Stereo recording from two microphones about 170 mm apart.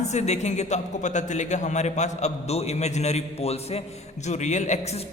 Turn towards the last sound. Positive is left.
turn(degrees=40)  # may be behind; listen again after turning